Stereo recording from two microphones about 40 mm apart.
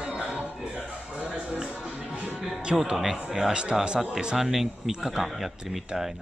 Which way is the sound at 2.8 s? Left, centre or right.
Centre.